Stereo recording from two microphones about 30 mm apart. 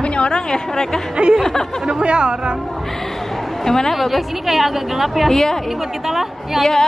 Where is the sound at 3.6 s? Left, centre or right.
Centre.